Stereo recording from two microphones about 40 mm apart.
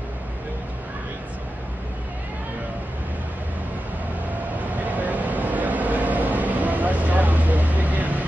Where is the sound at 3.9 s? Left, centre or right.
Right.